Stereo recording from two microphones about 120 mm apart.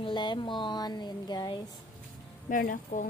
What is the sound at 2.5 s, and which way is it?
Speech, 90° left.